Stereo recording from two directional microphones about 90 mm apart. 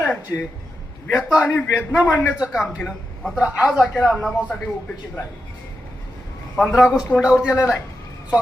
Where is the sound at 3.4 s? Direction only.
10° right (ahead or behind).